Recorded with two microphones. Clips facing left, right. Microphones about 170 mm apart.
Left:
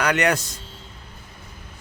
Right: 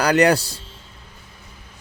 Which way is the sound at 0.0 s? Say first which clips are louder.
Right 5 dB; 35° right (ahead or behind).